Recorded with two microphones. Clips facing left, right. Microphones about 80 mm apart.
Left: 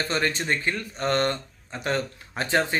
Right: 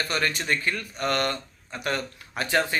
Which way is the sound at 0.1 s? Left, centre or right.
Left.